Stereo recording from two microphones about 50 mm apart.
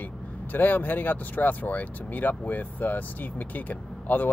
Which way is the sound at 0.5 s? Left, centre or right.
Left.